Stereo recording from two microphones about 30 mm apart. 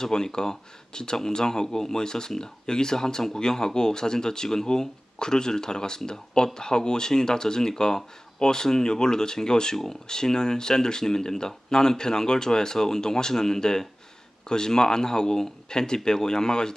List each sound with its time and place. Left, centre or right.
0.0 s speech: left